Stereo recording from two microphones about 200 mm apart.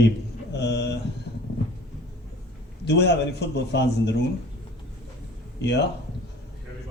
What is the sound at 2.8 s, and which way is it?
A man's voice, 55° left (ahead or behind).